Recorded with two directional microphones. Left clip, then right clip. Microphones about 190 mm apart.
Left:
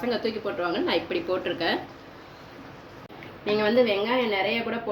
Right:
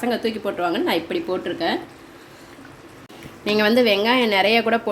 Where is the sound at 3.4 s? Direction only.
60° right (ahead or behind).